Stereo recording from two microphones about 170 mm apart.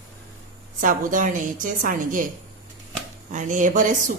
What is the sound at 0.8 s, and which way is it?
Speech, 50° right (ahead or behind).